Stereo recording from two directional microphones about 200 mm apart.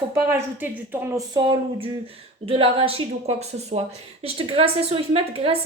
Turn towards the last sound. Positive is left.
turn(degrees=-30)  # may be behind; listen again after turning